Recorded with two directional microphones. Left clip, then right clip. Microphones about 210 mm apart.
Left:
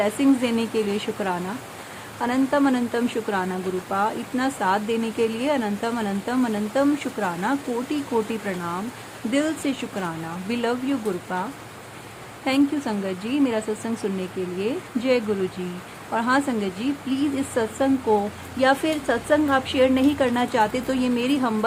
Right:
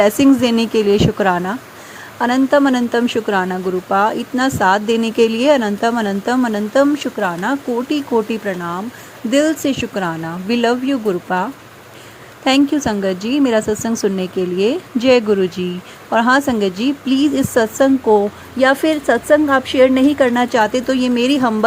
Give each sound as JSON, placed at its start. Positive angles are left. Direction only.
{"t": 0.0, "sound": "speech", "side_deg": -30}
{"t": 12.5, "sound": "speech", "side_deg": -30}